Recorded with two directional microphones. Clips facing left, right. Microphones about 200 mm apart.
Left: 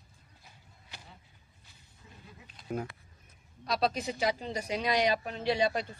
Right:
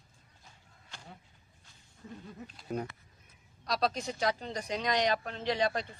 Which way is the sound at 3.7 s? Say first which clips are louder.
Left 1 dB; 5° left (ahead or behind).